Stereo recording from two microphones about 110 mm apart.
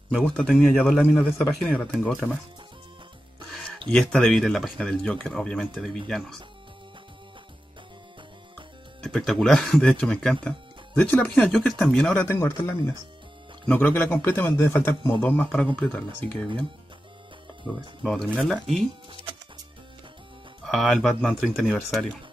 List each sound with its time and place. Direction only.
0.1 s speech: 5° left (ahead or behind)
3.9 s speech: 5° left (ahead or behind)
9.0 s speech: 5° left (ahead or behind)
12.3 s a man's voice: 20° left (ahead or behind)
15.2 s speech: 10° left (ahead or behind)
18.0 s speech: 5° left (ahead or behind)
20.6 s speech: centre (ahead or behind)